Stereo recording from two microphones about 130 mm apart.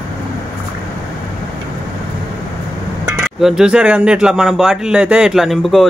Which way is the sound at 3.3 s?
5° right (ahead or behind).